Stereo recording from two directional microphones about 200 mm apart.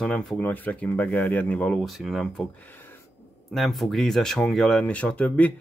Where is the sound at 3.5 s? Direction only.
Centre (ahead or behind).